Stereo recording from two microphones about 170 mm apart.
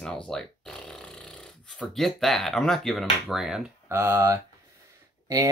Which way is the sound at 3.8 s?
15° right (ahead or behind).